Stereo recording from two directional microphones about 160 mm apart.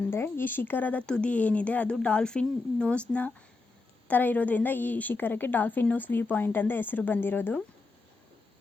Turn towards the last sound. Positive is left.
turn(degrees=10)  # may be behind; listen again after turning